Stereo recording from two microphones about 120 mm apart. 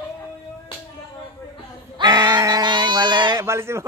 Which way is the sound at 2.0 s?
25° right (ahead or behind).